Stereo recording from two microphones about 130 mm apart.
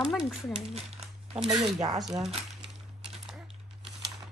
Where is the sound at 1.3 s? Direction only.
35° right (ahead or behind).